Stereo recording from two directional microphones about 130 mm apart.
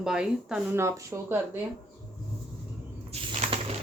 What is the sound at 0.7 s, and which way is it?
Speech, 20° right (ahead or behind).